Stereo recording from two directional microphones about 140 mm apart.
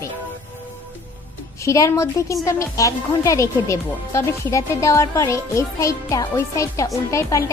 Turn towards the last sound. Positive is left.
turn(degrees=20)  # may be behind; listen again after turning